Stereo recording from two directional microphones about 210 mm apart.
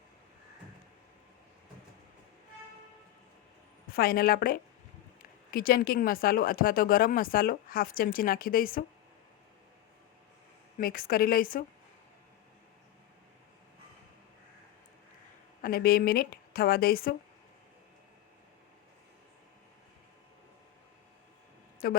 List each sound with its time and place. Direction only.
3.9 s speech: 45° left (ahead or behind)
10.8 s speech: 45° left (ahead or behind)
15.6 s speech: 45° left (ahead or behind)
21.8 s speech: 45° left (ahead or behind)